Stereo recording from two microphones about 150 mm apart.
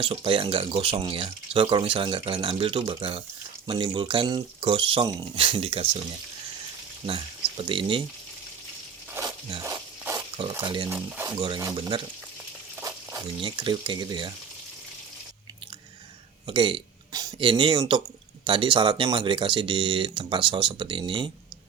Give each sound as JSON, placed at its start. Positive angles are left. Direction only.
{"t": 0.0, "sound": "speech", "side_deg": -40}
{"t": 7.0, "sound": "speech", "side_deg": -35}
{"t": 10.5, "sound": "speech", "side_deg": -30}
{"t": 10.8, "sound": "speech", "side_deg": -15}
{"t": 11.3, "sound": "speech", "side_deg": -30}
{"t": 12.8, "sound": "a sound", "side_deg": -20}
{"t": 13.4, "sound": "speech", "side_deg": -35}
{"t": 16.5, "sound": "speech", "side_deg": -35}